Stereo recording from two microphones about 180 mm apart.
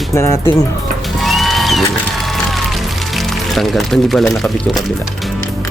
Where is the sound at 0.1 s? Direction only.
15° left (ahead or behind).